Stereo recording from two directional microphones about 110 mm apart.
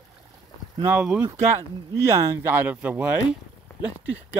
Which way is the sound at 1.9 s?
30° right (ahead or behind).